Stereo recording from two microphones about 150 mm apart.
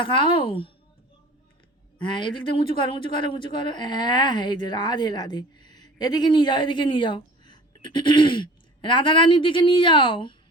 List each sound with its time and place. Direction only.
0.0 s speech: 35° left (ahead or behind)
2.0 s speech: 30° left (ahead or behind)